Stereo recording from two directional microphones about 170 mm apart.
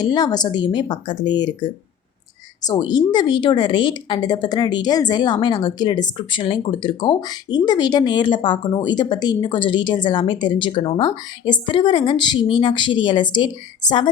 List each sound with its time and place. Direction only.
0.0 s a woman's voice: 25° left (ahead or behind)